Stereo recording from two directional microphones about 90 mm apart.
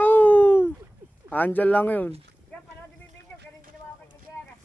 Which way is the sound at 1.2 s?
15° left (ahead or behind).